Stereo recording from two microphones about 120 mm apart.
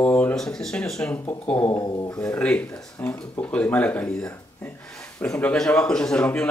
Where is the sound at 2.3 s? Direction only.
10° left (ahead or behind).